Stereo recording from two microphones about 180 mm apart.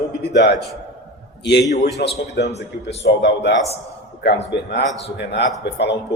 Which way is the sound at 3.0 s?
75° left (ahead or behind).